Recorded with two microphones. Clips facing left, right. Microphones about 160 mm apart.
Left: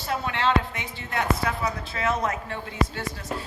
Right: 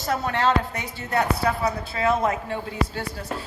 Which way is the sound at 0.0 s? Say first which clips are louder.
Right 3 dB; 40° right (ahead or behind).